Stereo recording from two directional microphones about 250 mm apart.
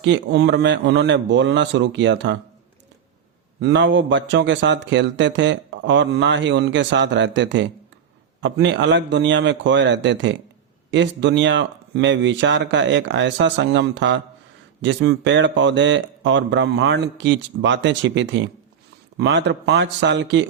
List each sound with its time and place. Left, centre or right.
0.0 s a man's voice: right
3.6 s a man's voice: right